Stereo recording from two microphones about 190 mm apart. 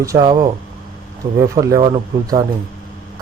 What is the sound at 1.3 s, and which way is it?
Speech, 15° right (ahead or behind).